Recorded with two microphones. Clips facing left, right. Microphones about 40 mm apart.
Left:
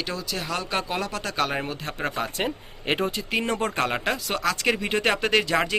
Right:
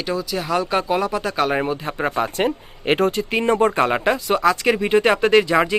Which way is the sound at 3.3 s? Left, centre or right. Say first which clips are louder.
Right 8 dB; right.